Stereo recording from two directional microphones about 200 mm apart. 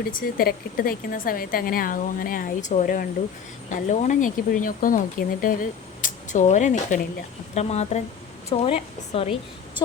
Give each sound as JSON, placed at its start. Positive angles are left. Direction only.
{"t": 0.0, "sound": "a woman's voice", "side_deg": 45}